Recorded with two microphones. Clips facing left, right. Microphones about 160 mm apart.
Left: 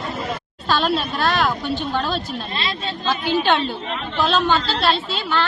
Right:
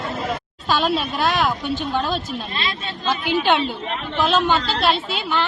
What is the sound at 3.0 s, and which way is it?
A woman's voice, 15° right (ahead or behind).